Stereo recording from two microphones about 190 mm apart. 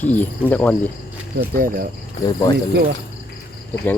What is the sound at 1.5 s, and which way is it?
Speech, 50° right (ahead or behind).